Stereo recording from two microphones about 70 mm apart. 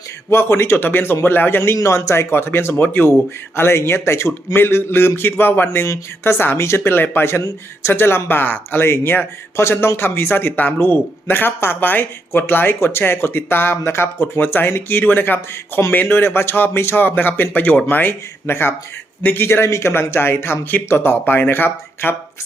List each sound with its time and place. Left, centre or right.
0.3 s speech: left